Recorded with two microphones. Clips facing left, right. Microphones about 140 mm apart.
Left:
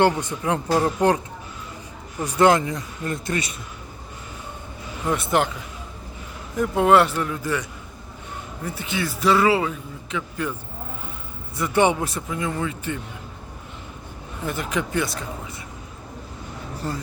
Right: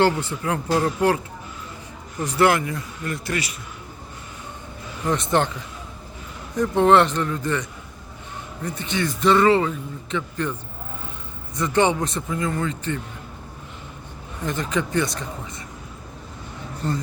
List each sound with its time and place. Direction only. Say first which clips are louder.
0.0 s speech: even; 15° left (ahead or behind)
5.0 s a man's voice: even; 5° left (ahead or behind)
6.6 s a man's voice: right 1 dB; 5° left (ahead or behind)
8.6 s a man's voice: right 2 dB; 5° left (ahead or behind)
11.5 s speech: even; 10° left (ahead or behind)
14.4 s a man's voice: right 1 dB; 5° left (ahead or behind)
16.8 s a man's voice: right 3 dB; 5° left (ahead or behind)